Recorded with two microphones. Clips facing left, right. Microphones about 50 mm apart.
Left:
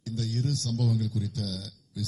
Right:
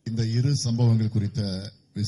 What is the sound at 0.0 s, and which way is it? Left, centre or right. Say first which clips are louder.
Speech: right 4 dB; right.